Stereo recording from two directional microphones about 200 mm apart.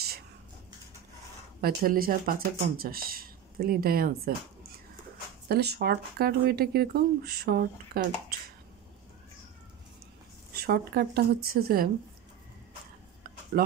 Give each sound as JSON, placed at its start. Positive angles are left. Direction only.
{"t": 1.6, "sound": "speech", "side_deg": -50}
{"t": 5.5, "sound": "speech", "side_deg": -55}
{"t": 10.5, "sound": "speech", "side_deg": -50}
{"t": 13.2, "sound": "a sound", "side_deg": -50}